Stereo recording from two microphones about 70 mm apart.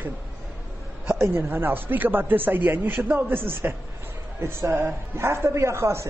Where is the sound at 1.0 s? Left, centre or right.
Right.